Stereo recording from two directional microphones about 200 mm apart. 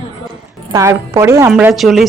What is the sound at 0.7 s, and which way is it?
A woman's voice, 15° right (ahead or behind).